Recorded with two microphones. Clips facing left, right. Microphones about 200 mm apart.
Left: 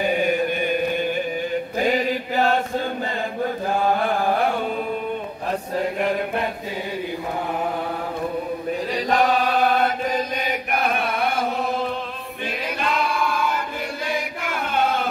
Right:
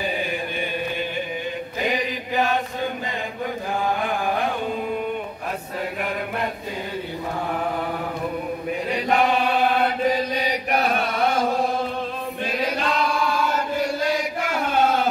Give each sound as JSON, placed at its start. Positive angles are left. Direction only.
{"t": 1.9, "sound": "chant", "side_deg": -15}
{"t": 8.9, "sound": "chant", "side_deg": 40}
{"t": 12.4, "sound": "chant", "side_deg": 55}